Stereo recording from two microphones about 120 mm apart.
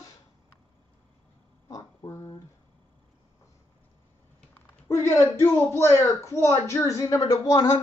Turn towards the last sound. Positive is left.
turn(degrees=30)  # may be behind; listen again after turning